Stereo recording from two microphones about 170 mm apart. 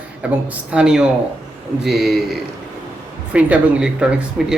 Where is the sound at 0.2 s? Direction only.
5° right (ahead or behind).